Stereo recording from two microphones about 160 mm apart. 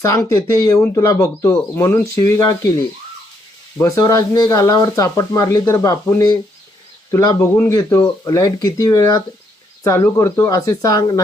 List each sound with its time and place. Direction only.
0.0 s speech: 20° left (ahead or behind)
3.8 s speech: 20° left (ahead or behind)